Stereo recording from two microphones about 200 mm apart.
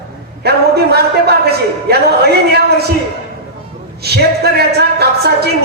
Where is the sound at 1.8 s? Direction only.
55° right (ahead or behind).